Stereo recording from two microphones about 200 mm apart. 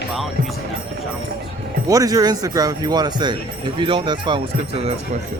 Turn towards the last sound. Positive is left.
turn(degrees=-25)  # may be behind; listen again after turning